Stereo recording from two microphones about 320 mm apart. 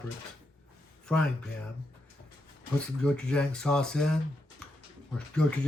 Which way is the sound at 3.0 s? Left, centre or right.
Centre.